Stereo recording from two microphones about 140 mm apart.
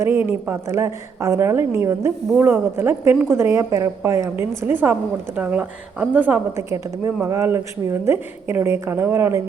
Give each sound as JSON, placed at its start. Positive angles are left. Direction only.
{"t": 0.0, "sound": "a woman's voice", "side_deg": -15}